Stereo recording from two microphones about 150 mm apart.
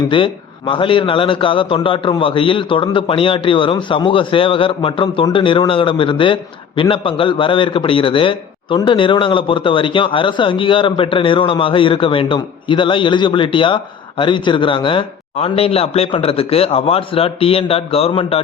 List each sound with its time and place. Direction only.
0.1 s a man's voice: 35° left (ahead or behind)